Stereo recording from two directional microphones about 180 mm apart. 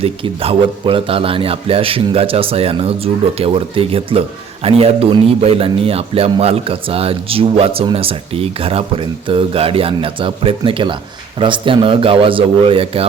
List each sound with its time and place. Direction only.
0.0 s a man's voice: 30° right (ahead or behind)